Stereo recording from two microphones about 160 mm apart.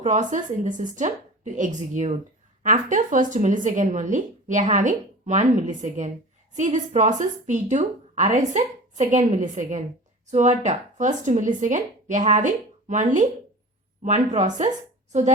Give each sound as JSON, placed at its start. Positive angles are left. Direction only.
{"t": 0.0, "sound": "a woman's voice", "side_deg": -50}